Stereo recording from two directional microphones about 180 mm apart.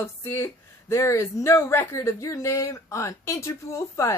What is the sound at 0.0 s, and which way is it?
Speech, 15° left (ahead or behind).